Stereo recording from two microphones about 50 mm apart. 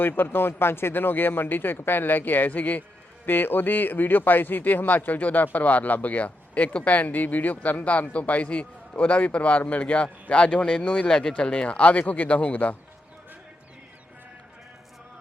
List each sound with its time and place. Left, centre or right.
0.0 s speech: left
3.2 s speech: left; by 11.3 s centre
11.3 s a man's voice: left